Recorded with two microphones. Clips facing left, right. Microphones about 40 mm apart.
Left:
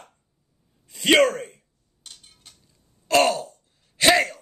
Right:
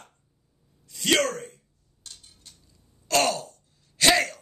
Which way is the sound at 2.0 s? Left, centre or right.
Left.